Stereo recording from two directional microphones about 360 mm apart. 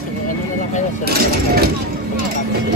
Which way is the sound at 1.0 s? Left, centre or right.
Right.